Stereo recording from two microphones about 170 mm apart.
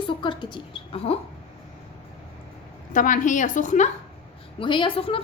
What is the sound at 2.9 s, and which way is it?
Speech, 50° left (ahead or behind).